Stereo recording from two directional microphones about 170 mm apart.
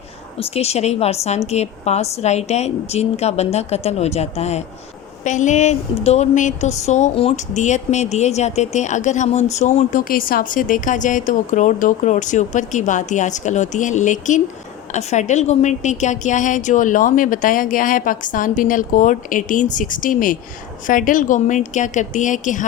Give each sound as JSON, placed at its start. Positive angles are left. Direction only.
{"t": 0.3, "sound": "a woman's voice", "side_deg": 35}